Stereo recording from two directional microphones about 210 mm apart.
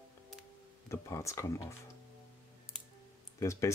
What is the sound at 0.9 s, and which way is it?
Speech, 15° left (ahead or behind).